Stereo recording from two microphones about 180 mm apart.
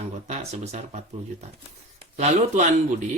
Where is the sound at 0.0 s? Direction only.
35° right (ahead or behind).